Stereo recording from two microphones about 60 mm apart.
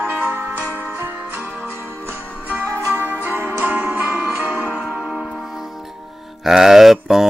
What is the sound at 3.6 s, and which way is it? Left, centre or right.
Music, right.